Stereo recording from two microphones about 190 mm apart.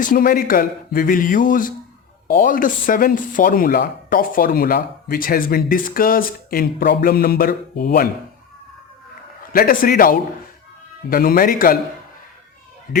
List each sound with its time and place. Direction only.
0.0 s speech: 50° left (ahead or behind)
9.5 s speech: 50° left (ahead or behind)